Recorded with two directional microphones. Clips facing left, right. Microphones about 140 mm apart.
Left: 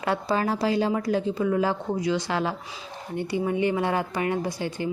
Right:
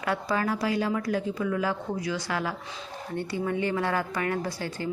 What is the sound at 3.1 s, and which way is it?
Speech, 15° left (ahead or behind).